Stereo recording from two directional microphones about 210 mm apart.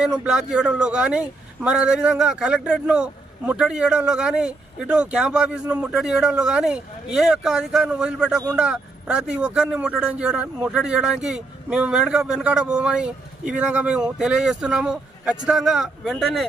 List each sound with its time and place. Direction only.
0.0 s speech: 5° right (ahead or behind)